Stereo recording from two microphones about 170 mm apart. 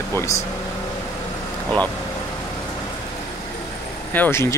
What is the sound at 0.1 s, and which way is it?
Speech, 15° left (ahead or behind).